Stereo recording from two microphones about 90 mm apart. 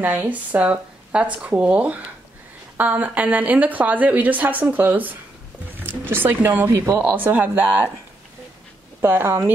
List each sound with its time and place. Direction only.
0.0 s a woman's voice: 20° right (ahead or behind)
9.0 s speech: 25° right (ahead or behind)